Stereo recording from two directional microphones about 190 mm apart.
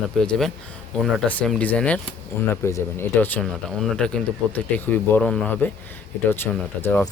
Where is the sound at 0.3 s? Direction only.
Centre (ahead or behind).